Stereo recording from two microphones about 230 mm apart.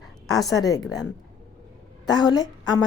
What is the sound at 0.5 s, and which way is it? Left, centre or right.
Speech, centre.